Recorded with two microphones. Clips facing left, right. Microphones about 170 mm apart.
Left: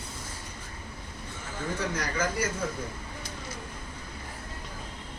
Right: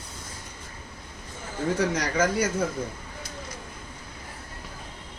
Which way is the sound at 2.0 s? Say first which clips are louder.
Right 5 dB; 80° right.